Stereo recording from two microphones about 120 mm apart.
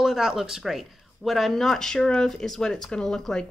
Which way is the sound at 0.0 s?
5° right (ahead or behind).